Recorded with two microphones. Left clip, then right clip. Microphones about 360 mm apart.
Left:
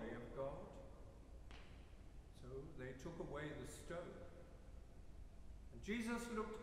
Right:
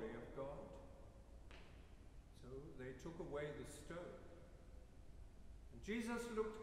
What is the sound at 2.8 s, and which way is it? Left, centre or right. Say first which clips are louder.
A man's voice: even; centre.